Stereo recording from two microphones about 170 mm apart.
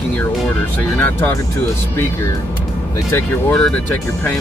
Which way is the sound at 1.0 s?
10° left (ahead or behind).